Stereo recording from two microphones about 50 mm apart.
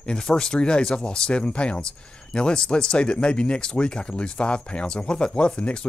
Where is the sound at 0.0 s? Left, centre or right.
Centre.